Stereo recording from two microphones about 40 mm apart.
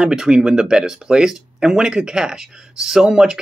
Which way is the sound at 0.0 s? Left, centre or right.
Centre.